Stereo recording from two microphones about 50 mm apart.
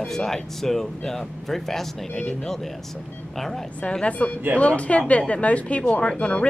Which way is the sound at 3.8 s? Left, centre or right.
Left.